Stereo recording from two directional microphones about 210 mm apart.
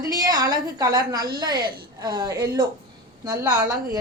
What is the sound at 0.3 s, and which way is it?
A woman's voice, 15° right (ahead or behind).